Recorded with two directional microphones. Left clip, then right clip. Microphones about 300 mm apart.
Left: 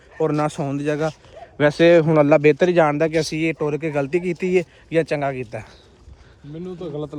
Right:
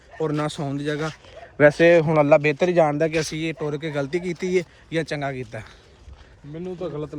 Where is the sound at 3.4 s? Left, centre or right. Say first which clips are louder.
Left 5 dB; left.